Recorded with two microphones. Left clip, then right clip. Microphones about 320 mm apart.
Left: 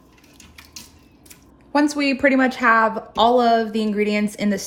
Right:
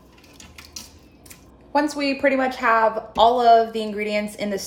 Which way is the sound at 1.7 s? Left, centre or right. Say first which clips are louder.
Left 2 dB; left.